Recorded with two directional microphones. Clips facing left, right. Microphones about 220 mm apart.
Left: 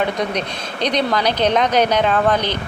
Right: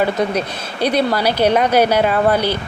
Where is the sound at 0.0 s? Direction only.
5° right (ahead or behind).